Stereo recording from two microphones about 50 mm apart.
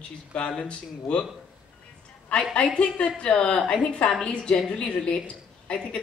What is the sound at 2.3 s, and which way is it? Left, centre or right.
A man's voice, left.